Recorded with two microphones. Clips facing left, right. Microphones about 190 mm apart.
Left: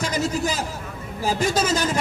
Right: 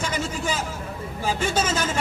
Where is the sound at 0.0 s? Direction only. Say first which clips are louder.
Left 4 dB; 40° left (ahead or behind).